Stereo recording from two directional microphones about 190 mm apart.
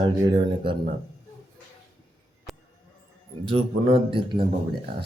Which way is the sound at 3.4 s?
30° right (ahead or behind).